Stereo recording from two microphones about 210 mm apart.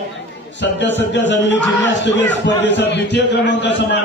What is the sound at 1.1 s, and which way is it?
A man's voice, 60° left (ahead or behind).